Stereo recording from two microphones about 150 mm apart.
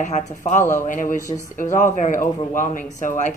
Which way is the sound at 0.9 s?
60° left (ahead or behind).